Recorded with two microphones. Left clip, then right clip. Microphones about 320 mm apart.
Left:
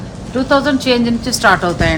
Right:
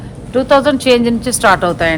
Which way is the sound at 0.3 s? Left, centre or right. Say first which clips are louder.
Right 3 dB; right.